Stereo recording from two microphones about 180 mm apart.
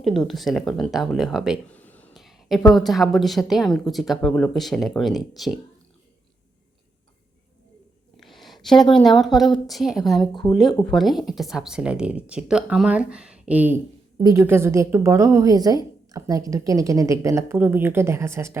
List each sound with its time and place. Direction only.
0.3 s speech: centre (ahead or behind)
8.1 s a woman's voice: centre (ahead or behind); by 18.6 s 15° right (ahead or behind)